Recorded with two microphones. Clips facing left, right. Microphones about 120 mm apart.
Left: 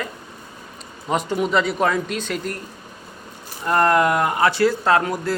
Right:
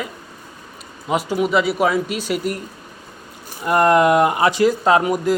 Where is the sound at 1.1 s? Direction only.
5° right (ahead or behind).